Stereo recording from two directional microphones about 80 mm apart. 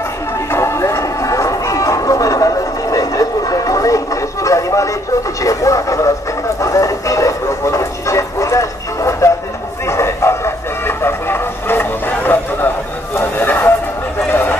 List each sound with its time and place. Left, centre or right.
0.5 s music: left
5.4 s radio: left
6.6 s a sound: left
9.8 s music: left
13.1 s a sound: left
14.3 s horse: left